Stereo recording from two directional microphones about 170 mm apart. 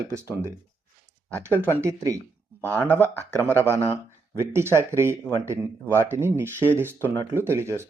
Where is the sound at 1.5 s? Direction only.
15° right (ahead or behind).